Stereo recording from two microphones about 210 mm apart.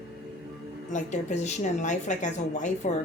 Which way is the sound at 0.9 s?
35° left (ahead or behind).